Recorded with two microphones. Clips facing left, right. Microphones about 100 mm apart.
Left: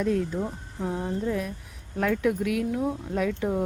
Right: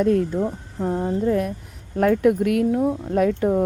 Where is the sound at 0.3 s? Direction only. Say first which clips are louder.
Right 7 dB; 40° right (ahead or behind).